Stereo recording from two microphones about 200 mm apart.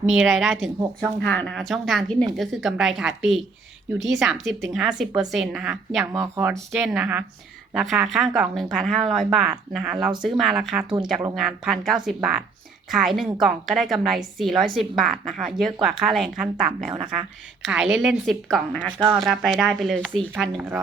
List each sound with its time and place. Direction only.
0.1 s a woman's voice: 5° right (ahead or behind)
6.1 s a woman's voice: 15° right (ahead or behind)
10.8 s speech: 20° right (ahead or behind)
11.1 s a woman's voice: 5° right (ahead or behind)
18.9 s speech: 20° right (ahead or behind)
19.2 s a woman's voice: centre (ahead or behind)
20.6 s speech: 10° right (ahead or behind)